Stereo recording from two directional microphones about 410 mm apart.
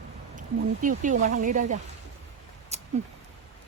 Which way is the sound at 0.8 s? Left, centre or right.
Centre.